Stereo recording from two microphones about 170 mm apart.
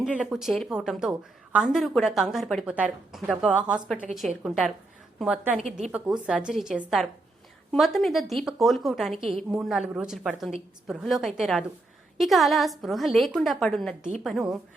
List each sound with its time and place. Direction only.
0.2 s a woman's voice: 5° right (ahead or behind)